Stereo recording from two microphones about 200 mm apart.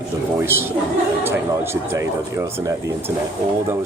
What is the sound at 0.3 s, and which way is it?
A woman's voice, 10° right (ahead or behind).